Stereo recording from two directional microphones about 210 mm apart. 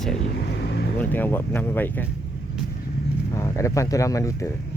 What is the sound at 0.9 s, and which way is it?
Speech, 10° left (ahead or behind).